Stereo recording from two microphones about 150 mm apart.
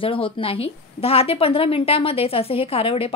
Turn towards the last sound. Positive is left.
turn(degrees=40)  # may be behind; listen again after turning